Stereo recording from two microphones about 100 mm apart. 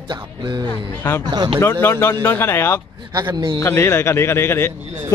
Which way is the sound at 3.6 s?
25° left (ahead or behind).